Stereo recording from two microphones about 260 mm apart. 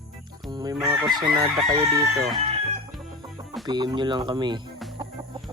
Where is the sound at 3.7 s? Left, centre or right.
Centre.